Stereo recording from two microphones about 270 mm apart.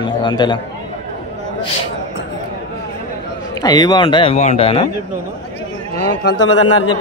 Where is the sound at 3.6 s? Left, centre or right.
Centre.